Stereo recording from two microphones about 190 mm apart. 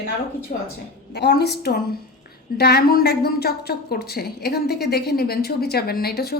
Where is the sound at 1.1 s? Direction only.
60° left (ahead or behind).